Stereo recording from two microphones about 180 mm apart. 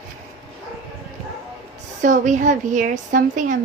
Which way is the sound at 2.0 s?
45° right (ahead or behind).